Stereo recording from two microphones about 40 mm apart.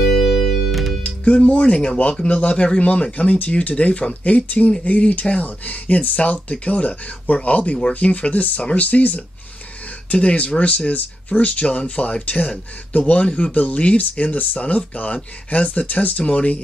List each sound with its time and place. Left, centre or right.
0.0 s music: centre
1.0 s speech: left